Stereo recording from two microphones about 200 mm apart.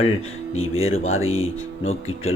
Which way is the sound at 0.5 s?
90° left.